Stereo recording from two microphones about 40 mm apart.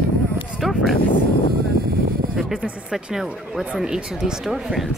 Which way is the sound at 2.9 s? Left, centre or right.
Centre.